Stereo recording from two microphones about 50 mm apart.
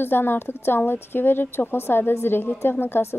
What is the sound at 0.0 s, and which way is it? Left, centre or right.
A woman's voice, left.